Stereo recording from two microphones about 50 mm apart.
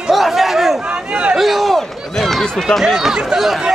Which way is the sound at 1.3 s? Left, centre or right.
Centre.